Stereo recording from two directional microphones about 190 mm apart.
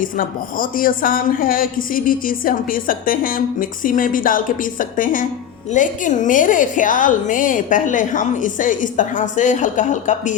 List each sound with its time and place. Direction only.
0.0 s speech: 45° left (ahead or behind)